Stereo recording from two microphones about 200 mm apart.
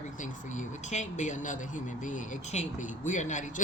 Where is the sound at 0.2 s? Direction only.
35° left (ahead or behind).